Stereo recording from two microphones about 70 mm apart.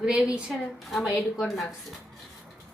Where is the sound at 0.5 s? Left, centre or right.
Centre.